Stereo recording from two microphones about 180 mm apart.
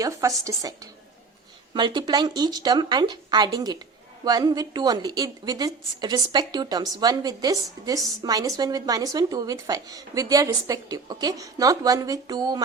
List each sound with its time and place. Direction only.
0.0 s a woman's voice: 20° right (ahead or behind)